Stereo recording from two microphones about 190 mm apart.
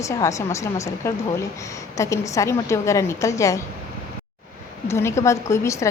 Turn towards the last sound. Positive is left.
turn(degrees=15)  # may be behind; listen again after turning